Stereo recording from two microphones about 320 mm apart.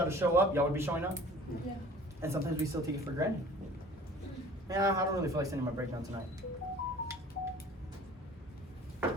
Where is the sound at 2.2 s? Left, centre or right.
Centre.